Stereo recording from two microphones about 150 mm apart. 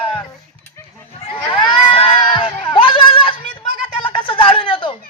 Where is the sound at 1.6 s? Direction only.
35° left (ahead or behind).